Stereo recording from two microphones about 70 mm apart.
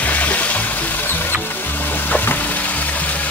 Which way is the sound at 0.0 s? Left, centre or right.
Left.